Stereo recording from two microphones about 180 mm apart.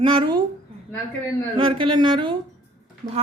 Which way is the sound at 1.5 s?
30° right (ahead or behind).